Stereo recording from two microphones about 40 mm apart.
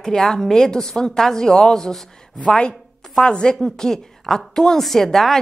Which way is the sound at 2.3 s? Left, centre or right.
Left.